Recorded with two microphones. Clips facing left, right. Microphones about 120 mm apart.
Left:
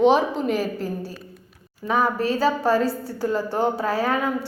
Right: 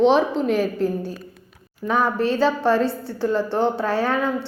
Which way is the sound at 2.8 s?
40° left (ahead or behind).